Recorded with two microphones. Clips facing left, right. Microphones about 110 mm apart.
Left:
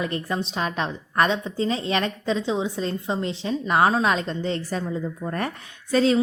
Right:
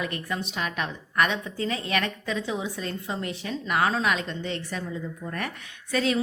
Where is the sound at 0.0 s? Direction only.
30° left (ahead or behind).